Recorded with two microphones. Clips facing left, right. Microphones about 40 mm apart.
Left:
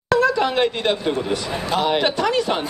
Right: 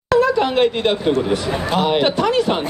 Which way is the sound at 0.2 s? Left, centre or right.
Centre.